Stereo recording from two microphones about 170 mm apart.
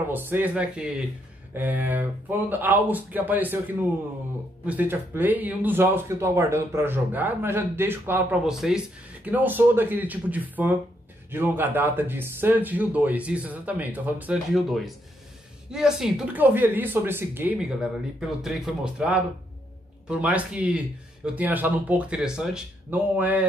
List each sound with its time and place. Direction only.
0.1 s speech: 10° right (ahead or behind)